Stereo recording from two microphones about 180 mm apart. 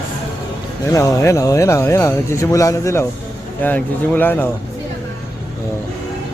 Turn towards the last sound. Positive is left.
turn(degrees=10)  # may be behind; listen again after turning